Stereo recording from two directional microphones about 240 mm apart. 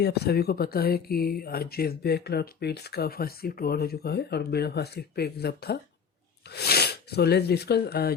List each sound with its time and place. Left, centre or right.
0.0 s speech: left